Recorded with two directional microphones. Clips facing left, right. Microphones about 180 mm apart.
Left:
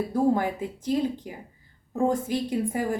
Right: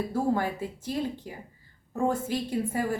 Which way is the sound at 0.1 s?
15° left (ahead or behind).